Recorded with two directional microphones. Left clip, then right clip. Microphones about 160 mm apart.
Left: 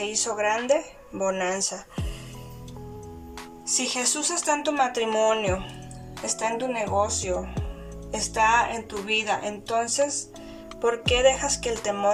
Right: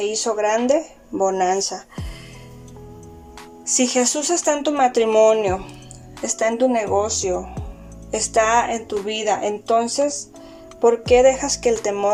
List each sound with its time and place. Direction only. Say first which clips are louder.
0.0 s speech: right 6 dB; 30° right (ahead or behind)
3.7 s speech: right 8 dB; 50° right (ahead or behind); by 5.5 s 25° right (ahead or behind)
6.2 s speech: right 8 dB; 45° right (ahead or behind); by 12.1 s 30° right (ahead or behind)